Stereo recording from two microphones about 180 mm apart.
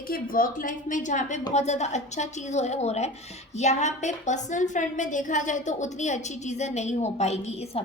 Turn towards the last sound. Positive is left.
turn(degrees=35)  # may be behind; listen again after turning